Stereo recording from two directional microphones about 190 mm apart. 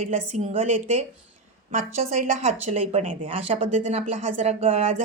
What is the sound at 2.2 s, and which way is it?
Speech, 40° right (ahead or behind).